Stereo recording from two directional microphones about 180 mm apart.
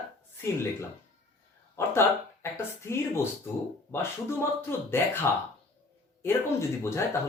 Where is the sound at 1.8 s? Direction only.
15° left (ahead or behind).